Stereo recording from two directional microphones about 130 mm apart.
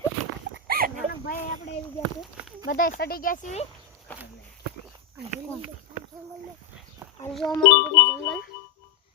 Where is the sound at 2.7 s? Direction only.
90° left; by 3.7 s 65° left (ahead or behind).